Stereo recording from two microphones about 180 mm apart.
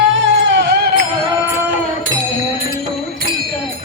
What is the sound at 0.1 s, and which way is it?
Music, 90° right.